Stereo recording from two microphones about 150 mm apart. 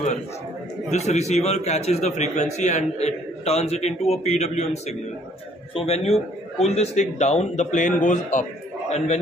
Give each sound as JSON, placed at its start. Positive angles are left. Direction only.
{"t": 0.8, "sound": "a man's voice", "side_deg": 50}
{"t": 5.8, "sound": "a man's voice", "side_deg": 45}